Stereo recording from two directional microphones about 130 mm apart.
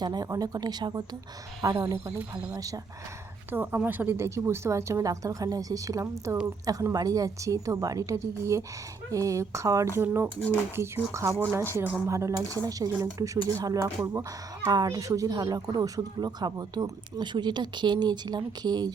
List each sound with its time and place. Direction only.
0.0 s a woman's voice: 30° right (ahead or behind)
3.5 s a woman's voice: 15° right (ahead or behind)
14.7 s speech: 30° right (ahead or behind)